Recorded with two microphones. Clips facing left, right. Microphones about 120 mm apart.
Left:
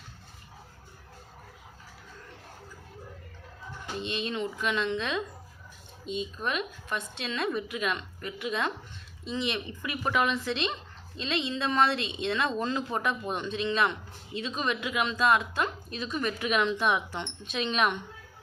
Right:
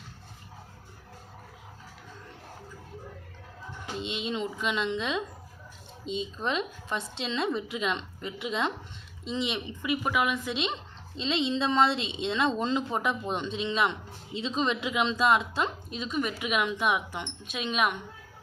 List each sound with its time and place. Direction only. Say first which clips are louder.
3.9 s speech: even; 15° right (ahead or behind)
10.0 s speech: left 4 dB; 5° right (ahead or behind)